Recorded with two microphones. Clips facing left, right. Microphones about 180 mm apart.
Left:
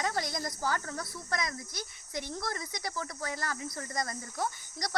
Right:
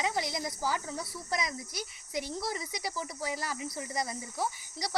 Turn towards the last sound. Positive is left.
turn(degrees=-5)  # may be behind; listen again after turning